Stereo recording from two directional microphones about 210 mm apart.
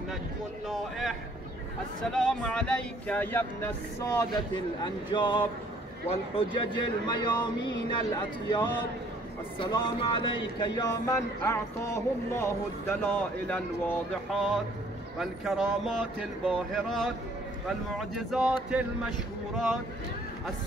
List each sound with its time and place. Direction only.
0.7 s speech: centre (ahead or behind)
4.4 s a man's voice: 20° left (ahead or behind); by 19.8 s centre (ahead or behind)